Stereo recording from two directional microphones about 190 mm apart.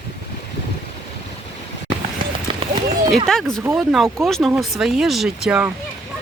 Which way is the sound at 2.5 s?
25° right (ahead or behind).